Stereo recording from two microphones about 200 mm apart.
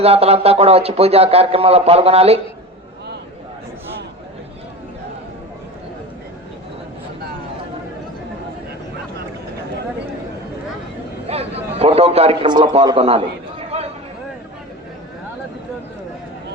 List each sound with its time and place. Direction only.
0.0 s speech: 30° right (ahead or behind)
11.3 s a man's voice: 30° right (ahead or behind)